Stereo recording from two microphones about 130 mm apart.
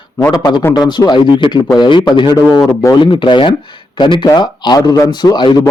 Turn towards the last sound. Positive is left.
turn(degrees=35)  # may be behind; listen again after turning